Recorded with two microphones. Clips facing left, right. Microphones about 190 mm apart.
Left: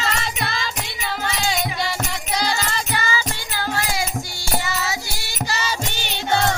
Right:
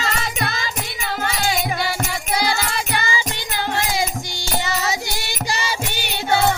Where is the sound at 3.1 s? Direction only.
20° right (ahead or behind).